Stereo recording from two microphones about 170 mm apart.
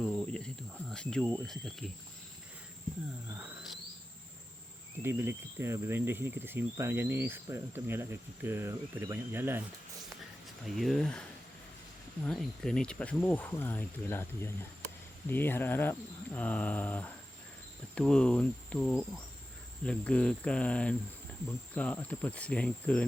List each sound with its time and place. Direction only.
0.0 s cricket: 5° left (ahead or behind)
5.0 s speech: 15° right (ahead or behind)
10.8 s speech: centre (ahead or behind)
12.2 s speech: 5° left (ahead or behind)